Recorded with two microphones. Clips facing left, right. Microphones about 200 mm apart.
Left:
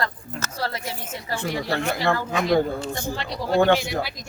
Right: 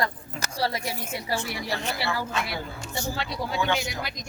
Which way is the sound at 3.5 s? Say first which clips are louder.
Left 10 dB; 55° left (ahead or behind).